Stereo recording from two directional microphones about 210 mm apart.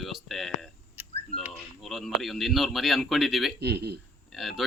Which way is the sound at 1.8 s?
Centre (ahead or behind).